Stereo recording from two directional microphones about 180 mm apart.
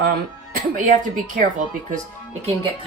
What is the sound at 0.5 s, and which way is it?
Speech, 50° right (ahead or behind).